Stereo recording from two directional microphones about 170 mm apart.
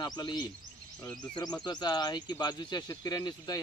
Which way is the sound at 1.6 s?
25° left (ahead or behind).